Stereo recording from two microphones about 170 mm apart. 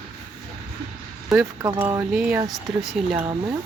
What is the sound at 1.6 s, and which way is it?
Speech, 15° right (ahead or behind).